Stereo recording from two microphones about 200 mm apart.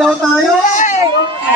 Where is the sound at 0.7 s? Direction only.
35° left (ahead or behind).